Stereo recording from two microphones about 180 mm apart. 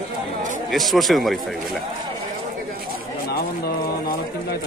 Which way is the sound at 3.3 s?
60° left (ahead or behind).